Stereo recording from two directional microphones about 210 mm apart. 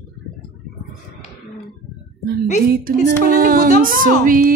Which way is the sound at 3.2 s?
45° right (ahead or behind).